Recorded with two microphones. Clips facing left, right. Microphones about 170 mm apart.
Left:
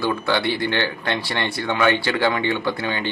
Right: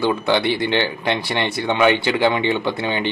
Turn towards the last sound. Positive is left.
turn(degrees=-20)  # may be behind; listen again after turning